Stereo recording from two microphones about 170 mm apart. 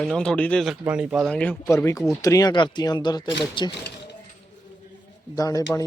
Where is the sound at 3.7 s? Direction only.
85° left.